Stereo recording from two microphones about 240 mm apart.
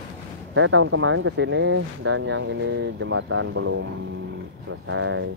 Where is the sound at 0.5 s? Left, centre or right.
Right.